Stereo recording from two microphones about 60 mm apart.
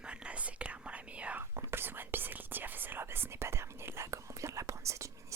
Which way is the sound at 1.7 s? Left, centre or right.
Right.